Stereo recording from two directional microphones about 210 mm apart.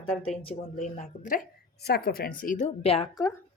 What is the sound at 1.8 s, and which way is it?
Speech, 50° left (ahead or behind).